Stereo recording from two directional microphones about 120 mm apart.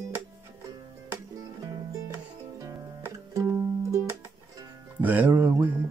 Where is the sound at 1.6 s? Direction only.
25° right (ahead or behind).